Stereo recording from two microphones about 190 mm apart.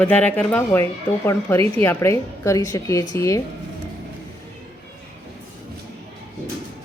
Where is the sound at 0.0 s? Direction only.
5° left (ahead or behind).